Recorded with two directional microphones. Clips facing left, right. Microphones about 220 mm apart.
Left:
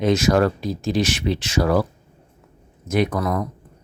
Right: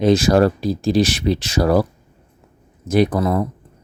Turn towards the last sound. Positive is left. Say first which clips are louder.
# right 4 dB
turn(degrees=-25)  # may be behind; listen again after turning